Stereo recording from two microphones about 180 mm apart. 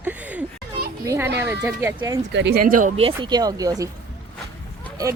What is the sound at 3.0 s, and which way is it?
Speech, 30° right (ahead or behind).